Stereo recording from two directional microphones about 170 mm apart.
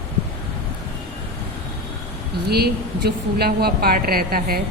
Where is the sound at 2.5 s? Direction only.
70° right (ahead or behind).